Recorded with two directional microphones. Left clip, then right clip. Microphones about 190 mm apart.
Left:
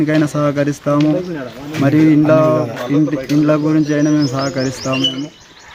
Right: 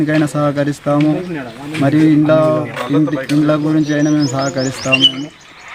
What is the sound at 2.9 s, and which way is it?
Speech, 30° right (ahead or behind).